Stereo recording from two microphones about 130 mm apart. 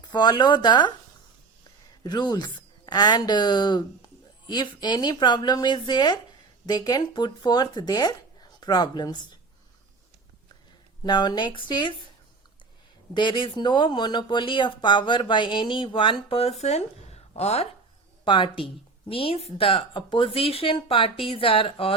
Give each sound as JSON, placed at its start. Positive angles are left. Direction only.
{"t": 0.1, "sound": "speech", "side_deg": 35}
{"t": 2.0, "sound": "speech", "side_deg": 35}
{"t": 11.0, "sound": "speech", "side_deg": 35}
{"t": 13.1, "sound": "speech", "side_deg": 40}
{"t": 18.3, "sound": "speech", "side_deg": 40}